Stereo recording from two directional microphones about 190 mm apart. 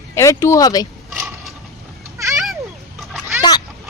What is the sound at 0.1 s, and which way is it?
Speech, 15° left (ahead or behind).